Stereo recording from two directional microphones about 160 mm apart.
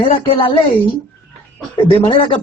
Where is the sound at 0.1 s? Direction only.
35° left (ahead or behind).